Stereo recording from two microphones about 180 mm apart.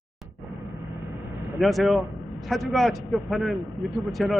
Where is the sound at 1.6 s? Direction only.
Centre (ahead or behind).